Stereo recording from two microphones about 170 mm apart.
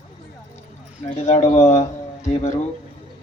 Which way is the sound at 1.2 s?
40° left (ahead or behind).